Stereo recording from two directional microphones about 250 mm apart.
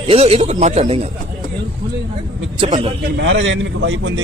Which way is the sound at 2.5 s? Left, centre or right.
Right.